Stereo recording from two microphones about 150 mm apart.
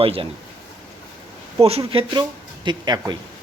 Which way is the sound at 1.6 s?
40° right (ahead or behind).